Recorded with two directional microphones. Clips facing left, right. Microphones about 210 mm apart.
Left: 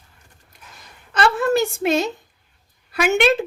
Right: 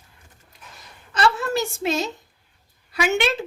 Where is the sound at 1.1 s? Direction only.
55° left (ahead or behind).